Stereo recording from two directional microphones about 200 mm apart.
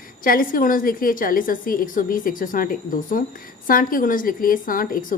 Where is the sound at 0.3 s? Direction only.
45° left (ahead or behind).